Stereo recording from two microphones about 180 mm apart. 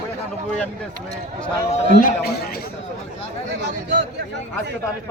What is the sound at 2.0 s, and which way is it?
Speech, 55° left (ahead or behind).